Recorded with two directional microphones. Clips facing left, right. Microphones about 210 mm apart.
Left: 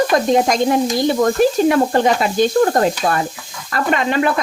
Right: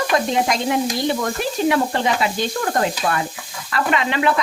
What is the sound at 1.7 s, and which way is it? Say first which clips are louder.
Sizzle: left 5 dB; 45° left (ahead or behind).